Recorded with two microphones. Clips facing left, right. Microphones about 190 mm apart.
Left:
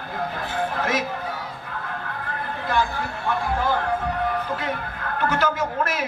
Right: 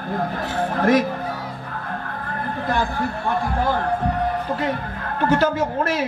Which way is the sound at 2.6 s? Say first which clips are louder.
Even; 45° right (ahead or behind).